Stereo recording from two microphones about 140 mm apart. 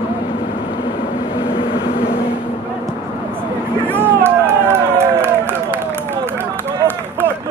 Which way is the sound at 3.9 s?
15° right (ahead or behind).